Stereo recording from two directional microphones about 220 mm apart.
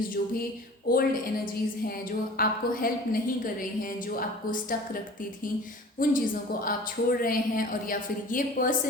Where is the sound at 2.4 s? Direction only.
40° left (ahead or behind).